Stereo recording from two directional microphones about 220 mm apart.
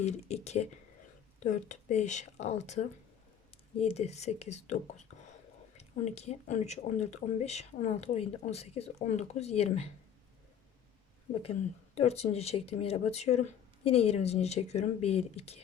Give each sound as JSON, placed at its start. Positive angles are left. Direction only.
{"t": 0.0, "sound": "speech", "side_deg": 30}
{"t": 11.9, "sound": "speech", "side_deg": 30}